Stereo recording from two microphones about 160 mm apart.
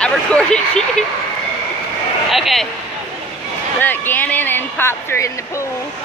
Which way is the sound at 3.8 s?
10° left (ahead or behind).